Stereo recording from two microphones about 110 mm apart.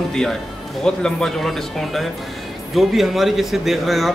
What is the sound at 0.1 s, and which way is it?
Speech, 5° left (ahead or behind).